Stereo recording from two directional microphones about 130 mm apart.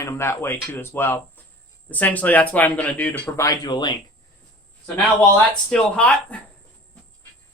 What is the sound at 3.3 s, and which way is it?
Speech, 25° left (ahead or behind).